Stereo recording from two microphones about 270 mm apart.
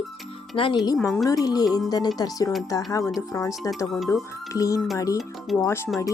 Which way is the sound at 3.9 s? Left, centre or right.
Centre.